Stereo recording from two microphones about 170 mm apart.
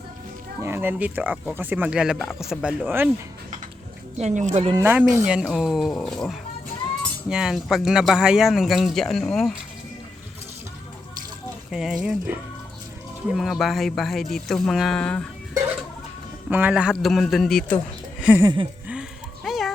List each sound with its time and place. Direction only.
0.6 s speech: 15° right (ahead or behind)
4.2 s speech: 45° right (ahead or behind)
4.8 s speech: 10° right (ahead or behind)
11.7 s speech: 5° right (ahead or behind)
16.5 s speech: 10° right (ahead or behind)
18.2 s a sound: 10° right (ahead or behind)
18.4 s a sound: 30° right (ahead or behind)
19.5 s music: centre (ahead or behind)